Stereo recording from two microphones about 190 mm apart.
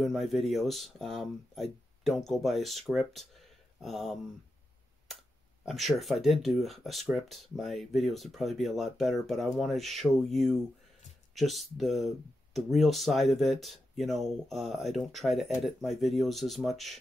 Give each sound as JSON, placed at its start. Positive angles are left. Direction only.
{"t": 0.0, "sound": "speech", "side_deg": 0}
{"t": 5.7, "sound": "speech", "side_deg": 0}